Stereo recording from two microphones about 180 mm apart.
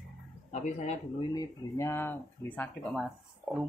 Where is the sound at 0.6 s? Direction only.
40° left (ahead or behind).